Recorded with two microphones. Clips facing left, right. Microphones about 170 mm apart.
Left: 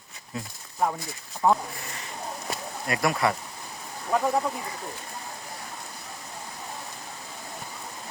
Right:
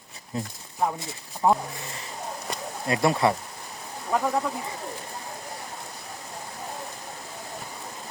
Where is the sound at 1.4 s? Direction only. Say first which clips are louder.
Right 1 dB; 25° right (ahead or behind).